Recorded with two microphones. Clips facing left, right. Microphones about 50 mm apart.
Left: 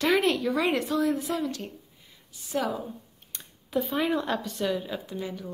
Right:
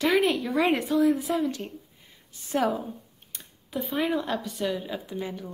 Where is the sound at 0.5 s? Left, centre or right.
Right.